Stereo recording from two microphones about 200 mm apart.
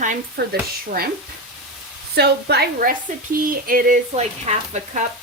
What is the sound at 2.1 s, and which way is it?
A woman's voice, 55° right (ahead or behind).